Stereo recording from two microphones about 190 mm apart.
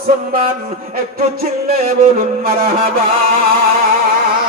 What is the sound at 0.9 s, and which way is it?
Music, 50° right (ahead or behind).